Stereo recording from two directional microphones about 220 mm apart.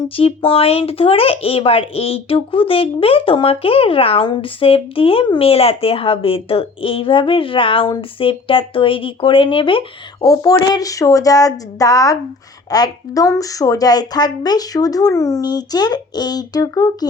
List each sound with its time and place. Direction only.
0.2 s speech: 25° left (ahead or behind)